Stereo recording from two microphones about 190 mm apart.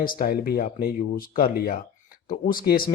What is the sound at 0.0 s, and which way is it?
Speech, 50° left (ahead or behind).